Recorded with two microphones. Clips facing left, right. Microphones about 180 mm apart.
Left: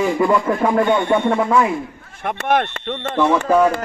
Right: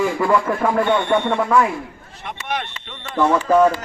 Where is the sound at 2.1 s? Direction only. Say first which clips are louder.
Left 9 dB; 55° left (ahead or behind).